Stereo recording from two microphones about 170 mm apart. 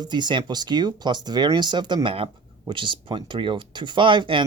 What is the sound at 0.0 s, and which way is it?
Speech, 25° right (ahead or behind).